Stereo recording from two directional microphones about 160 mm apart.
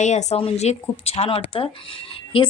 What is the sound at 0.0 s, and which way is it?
A woman's voice, 45° left (ahead or behind).